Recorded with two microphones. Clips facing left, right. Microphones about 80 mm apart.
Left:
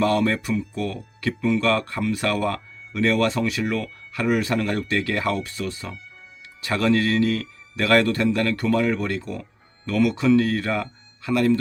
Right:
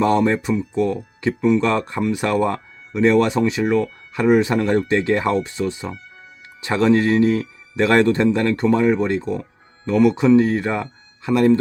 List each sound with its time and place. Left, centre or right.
0.0 s a man's voice: right